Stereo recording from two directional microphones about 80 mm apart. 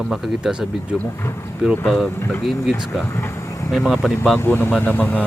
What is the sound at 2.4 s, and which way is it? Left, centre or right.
Speech, centre.